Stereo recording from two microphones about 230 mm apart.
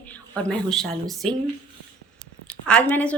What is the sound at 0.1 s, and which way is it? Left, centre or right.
Speech, centre.